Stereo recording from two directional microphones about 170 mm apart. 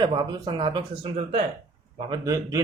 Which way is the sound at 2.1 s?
20° right (ahead or behind).